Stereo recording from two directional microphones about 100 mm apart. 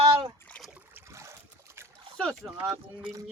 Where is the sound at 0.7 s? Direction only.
25° right (ahead or behind).